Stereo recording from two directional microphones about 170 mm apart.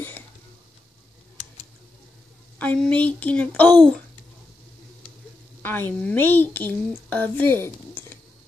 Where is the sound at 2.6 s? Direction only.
10° left (ahead or behind).